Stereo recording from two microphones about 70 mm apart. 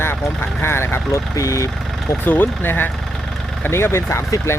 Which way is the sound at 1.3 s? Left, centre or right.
Left.